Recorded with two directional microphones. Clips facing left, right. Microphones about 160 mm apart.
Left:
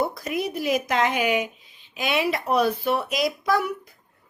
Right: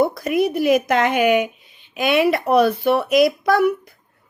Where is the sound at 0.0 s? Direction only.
65° right (ahead or behind).